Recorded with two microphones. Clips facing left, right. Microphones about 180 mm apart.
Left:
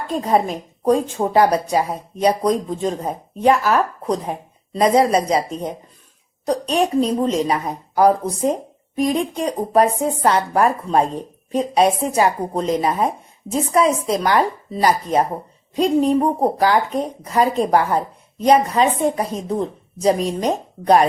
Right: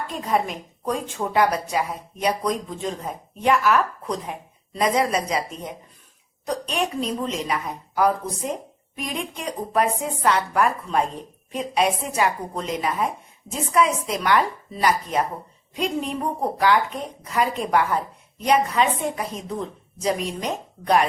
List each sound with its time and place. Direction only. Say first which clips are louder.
0.1 s speech: left 7 dB; 35° left (ahead or behind)